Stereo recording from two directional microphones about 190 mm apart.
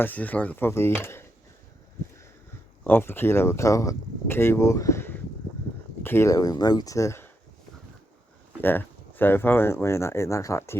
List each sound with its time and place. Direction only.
0.0 s speech: 10° left (ahead or behind)
2.8 s speech: 10° left (ahead or behind)
8.6 s speech: 10° left (ahead or behind)